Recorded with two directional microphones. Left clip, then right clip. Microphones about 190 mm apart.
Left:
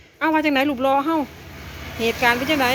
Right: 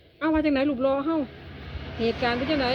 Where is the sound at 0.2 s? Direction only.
10° right (ahead or behind).